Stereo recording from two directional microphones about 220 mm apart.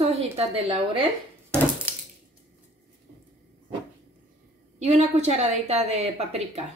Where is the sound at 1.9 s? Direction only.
5° right (ahead or behind).